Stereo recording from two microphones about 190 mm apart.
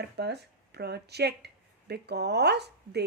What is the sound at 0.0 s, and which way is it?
Speech, 60° right (ahead or behind).